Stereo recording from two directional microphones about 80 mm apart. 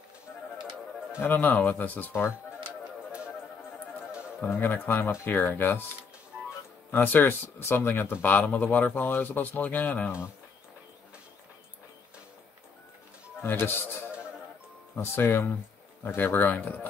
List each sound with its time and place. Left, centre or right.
1.2 s speech: left
4.4 s speech: left
6.9 s speech: left
13.4 s speech: left
15.0 s speech: left